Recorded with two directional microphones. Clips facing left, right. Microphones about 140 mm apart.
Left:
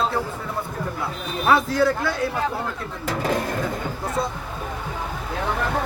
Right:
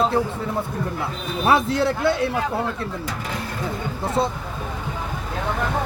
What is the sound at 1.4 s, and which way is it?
Speech, 20° right (ahead or behind).